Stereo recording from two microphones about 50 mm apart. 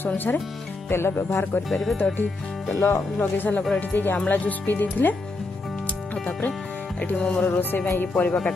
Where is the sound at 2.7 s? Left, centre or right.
Left.